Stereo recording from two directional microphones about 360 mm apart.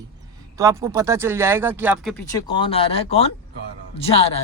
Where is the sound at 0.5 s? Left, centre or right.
Centre.